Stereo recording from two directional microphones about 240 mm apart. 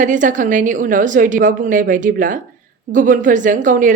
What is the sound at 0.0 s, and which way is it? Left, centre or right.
A woman's voice, right.